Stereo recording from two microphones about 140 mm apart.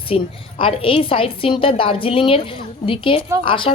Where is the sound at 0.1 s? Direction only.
45° left (ahead or behind).